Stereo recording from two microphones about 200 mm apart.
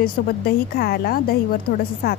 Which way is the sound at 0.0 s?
50° left (ahead or behind).